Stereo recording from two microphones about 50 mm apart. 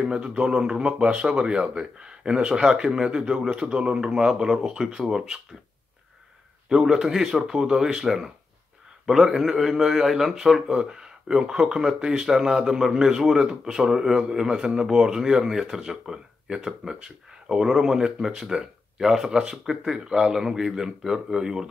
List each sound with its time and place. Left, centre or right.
0.0 s a man's voice: centre
6.7 s a man's voice: centre